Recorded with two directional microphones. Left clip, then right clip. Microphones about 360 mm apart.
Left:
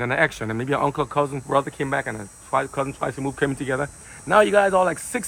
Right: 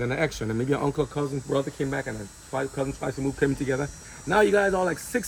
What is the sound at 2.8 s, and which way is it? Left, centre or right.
Speech, left.